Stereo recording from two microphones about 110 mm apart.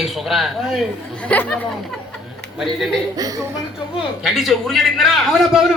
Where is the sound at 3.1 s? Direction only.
35° right (ahead or behind).